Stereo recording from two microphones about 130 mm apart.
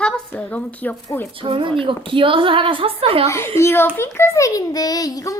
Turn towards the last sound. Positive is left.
turn(degrees=30)  # may be behind; listen again after turning